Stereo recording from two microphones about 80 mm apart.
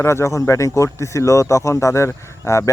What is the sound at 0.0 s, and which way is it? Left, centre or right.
Speech, left.